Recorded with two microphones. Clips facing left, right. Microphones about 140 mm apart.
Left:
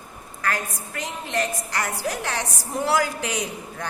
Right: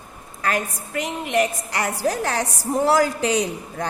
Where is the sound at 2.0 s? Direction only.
40° right (ahead or behind).